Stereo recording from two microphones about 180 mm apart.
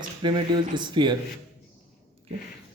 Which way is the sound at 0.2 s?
25° right (ahead or behind).